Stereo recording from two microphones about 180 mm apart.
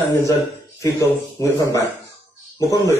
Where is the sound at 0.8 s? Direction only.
15° left (ahead or behind).